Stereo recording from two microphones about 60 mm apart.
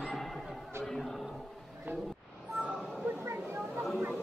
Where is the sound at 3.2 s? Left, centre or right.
Right.